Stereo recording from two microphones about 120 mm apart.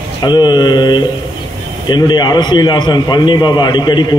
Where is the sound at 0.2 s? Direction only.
40° left (ahead or behind).